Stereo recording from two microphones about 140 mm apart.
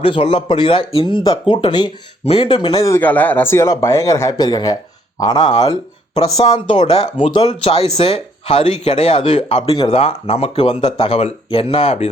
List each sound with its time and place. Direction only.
0.0 s speech: 40° left (ahead or behind)
2.2 s speech: 45° left (ahead or behind)
2.8 s speech: 15° left (ahead or behind); by 12.1 s 45° left (ahead or behind)